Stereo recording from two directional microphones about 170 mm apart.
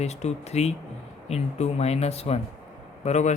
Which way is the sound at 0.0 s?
40° left (ahead or behind).